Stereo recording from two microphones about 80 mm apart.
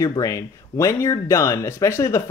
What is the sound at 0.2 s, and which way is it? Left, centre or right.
Speech, left.